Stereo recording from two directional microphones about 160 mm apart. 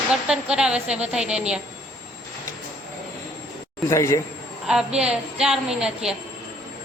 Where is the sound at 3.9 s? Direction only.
20° left (ahead or behind).